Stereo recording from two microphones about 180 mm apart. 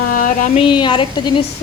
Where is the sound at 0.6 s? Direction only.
25° left (ahead or behind).